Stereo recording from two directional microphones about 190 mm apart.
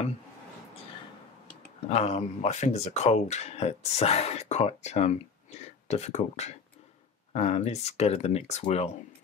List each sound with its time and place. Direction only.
1.8 s speech: 35° left (ahead or behind)